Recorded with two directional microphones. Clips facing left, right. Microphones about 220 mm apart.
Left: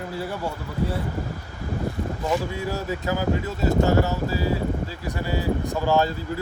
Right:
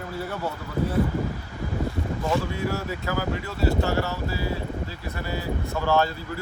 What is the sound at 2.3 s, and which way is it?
Speech, 15° left (ahead or behind).